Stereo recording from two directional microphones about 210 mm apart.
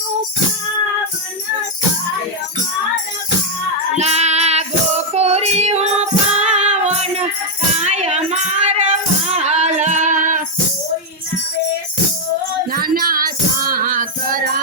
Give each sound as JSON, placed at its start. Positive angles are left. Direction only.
{"t": 3.9, "sound": "child singing", "side_deg": -30}
{"t": 7.8, "sound": "music", "side_deg": -30}
{"t": 12.7, "sound": "child singing", "side_deg": -45}